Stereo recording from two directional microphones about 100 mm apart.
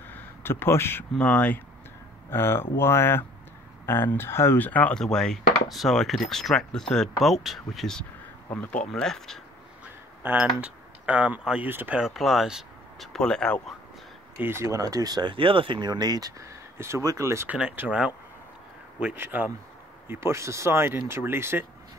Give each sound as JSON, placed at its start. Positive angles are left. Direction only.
{"t": 0.1, "sound": "a sound", "side_deg": 20}
{"t": 1.1, "sound": "speech", "side_deg": 10}
{"t": 2.3, "sound": "speech", "side_deg": 20}
{"t": 5.0, "sound": "speech", "side_deg": 5}
{"t": 10.3, "sound": "speech", "side_deg": -15}
{"t": 12.0, "sound": "speech", "side_deg": 0}
{"t": 14.4, "sound": "speech", "side_deg": -25}
{"t": 17.5, "sound": "speech", "side_deg": -15}
{"t": 19.1, "sound": "speech", "side_deg": -20}